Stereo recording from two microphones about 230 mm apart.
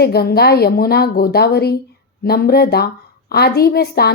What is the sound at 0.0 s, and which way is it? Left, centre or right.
A woman's voice, left.